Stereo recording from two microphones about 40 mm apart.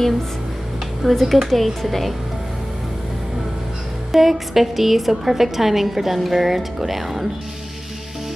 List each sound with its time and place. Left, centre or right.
1.0 s a woman's voice: centre
4.1 s a woman's voice: centre